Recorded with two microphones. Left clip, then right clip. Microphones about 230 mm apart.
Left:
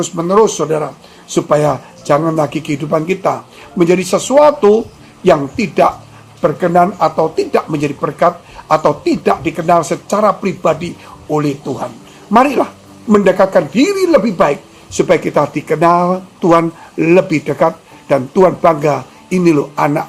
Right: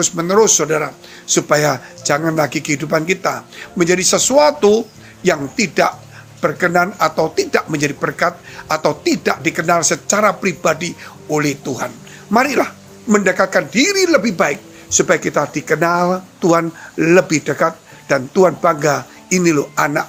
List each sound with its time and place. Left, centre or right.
0.0 s speech: right